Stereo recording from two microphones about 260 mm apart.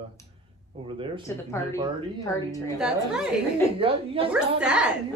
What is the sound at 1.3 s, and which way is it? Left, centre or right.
A woman's voice, centre.